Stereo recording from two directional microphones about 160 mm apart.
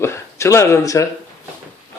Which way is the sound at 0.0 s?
15° left (ahead or behind).